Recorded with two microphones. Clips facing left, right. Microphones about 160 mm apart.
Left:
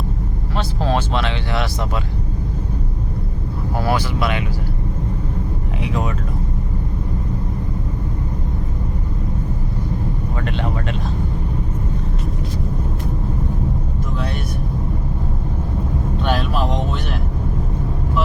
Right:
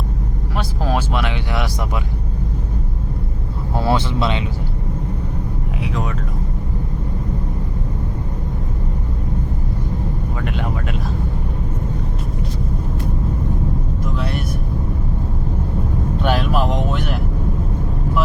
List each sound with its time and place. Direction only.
0.5 s vehicle: 10° right (ahead or behind)
3.8 s speech: 25° right (ahead or behind)
10.4 s speech: 10° right (ahead or behind)